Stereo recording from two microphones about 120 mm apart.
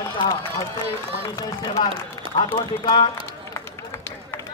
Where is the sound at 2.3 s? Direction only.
40° left (ahead or behind).